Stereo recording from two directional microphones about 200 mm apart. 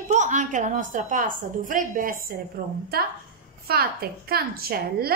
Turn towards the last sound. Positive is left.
turn(degrees=-50)  # may be behind; listen again after turning